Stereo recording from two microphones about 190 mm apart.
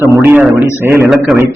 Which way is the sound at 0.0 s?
10° right (ahead or behind).